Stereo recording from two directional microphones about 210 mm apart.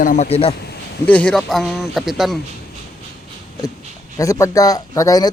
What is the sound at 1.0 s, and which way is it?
Speech, 5° left (ahead or behind).